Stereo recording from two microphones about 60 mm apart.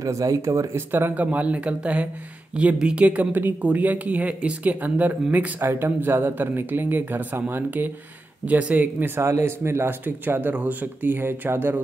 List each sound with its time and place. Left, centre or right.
0.0 s speech: right
0.7 s speech: right
1.1 s speech: right
5.6 s speech: right
9.4 s speech: right
10.0 s speech: right